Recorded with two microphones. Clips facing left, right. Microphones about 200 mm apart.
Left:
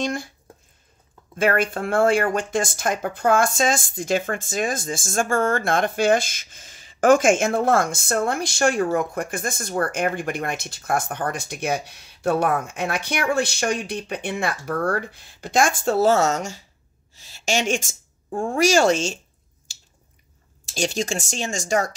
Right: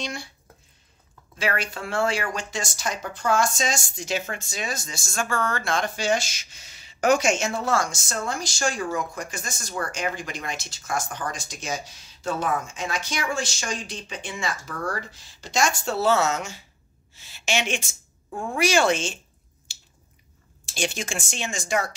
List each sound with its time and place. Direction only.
0.0 s speech: 50° left (ahead or behind)
1.3 s a woman's voice: 50° left (ahead or behind)
20.7 s speech: 40° left (ahead or behind)